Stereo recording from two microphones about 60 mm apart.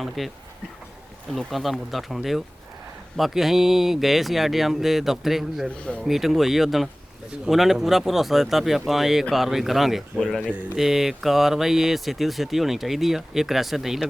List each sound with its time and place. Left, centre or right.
0.2 s speech: centre